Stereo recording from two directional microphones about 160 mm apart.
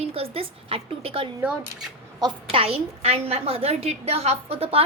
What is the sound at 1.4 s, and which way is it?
Speech, 5° right (ahead or behind).